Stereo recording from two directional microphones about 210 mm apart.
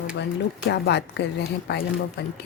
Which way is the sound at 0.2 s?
55° left (ahead or behind).